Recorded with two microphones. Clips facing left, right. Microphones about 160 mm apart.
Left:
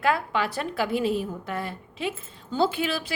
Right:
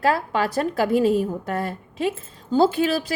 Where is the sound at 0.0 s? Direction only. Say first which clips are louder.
Right 3 dB; 40° right (ahead or behind).